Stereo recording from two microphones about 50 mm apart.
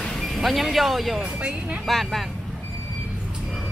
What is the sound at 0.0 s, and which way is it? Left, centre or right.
Speech, centre.